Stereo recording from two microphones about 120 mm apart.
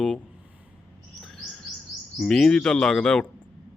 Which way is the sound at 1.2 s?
Centre (ahead or behind).